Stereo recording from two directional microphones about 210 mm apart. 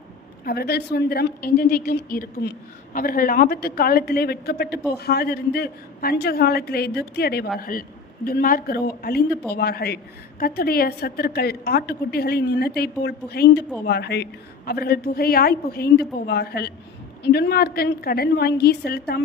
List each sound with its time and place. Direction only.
0.4 s a woman's voice: 50° left (ahead or behind)